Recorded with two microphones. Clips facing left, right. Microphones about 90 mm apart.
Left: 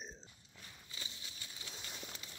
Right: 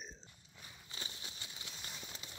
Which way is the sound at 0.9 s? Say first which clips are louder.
Right 3 dB; 35° right (ahead or behind).